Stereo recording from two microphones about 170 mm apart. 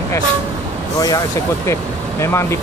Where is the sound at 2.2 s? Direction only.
15° left (ahead or behind).